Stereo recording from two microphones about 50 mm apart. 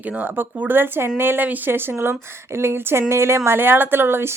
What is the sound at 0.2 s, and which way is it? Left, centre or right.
Speech, right.